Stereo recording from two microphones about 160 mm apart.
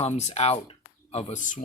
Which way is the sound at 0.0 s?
40° left (ahead or behind).